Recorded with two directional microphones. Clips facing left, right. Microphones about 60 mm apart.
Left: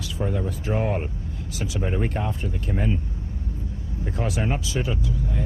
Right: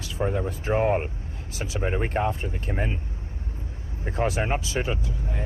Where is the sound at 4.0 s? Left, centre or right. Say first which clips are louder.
Right 1 dB; right.